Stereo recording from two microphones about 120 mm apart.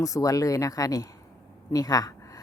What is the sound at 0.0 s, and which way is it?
A woman's voice, 30° left (ahead or behind).